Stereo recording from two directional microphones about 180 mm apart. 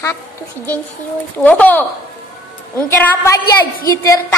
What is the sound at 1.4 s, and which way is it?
Speech, 10° left (ahead or behind).